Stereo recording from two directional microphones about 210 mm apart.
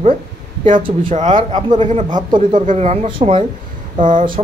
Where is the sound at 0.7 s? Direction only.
25° right (ahead or behind).